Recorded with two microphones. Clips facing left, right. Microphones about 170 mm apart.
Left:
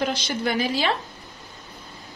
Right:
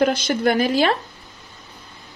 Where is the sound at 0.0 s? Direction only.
55° right (ahead or behind).